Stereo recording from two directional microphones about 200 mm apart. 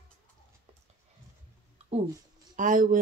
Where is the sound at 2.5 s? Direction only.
40° right (ahead or behind).